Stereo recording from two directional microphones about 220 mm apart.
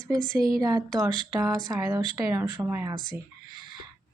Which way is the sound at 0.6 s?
15° right (ahead or behind).